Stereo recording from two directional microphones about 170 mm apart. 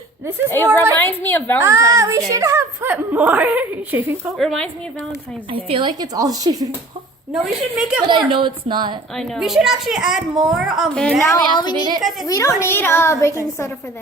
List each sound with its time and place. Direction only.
0.3 s a woman's voice: 10° right (ahead or behind)
0.9 s a child's voice: 10° left (ahead or behind)
1.6 s a woman's voice: 20° right (ahead or behind)
4.4 s a woman's voice: 5° left (ahead or behind)
5.5 s a woman's voice: 30° right (ahead or behind)
7.3 s a woman's voice: 5° right (ahead or behind)
8.1 s a woman's voice: 30° right (ahead or behind)
9.1 s a woman's voice: centre (ahead or behind)
11.3 s a woman's voice: 25° left (ahead or behind)